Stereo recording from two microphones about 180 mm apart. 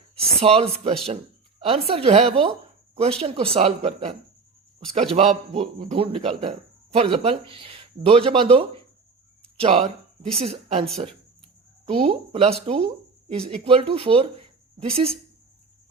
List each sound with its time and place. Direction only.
0.2 s a man's voice: 35° right (ahead or behind)
5.1 s a man's voice: 40° right (ahead or behind)
11.9 s a man's voice: 30° right (ahead or behind)